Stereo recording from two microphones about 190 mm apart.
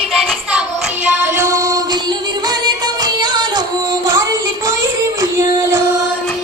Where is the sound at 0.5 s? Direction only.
10° right (ahead or behind).